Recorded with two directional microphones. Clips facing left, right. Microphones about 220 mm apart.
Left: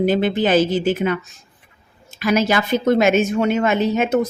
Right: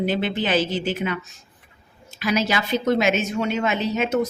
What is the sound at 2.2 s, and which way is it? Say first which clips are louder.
Speech: left 5 dB; 50° left (ahead or behind).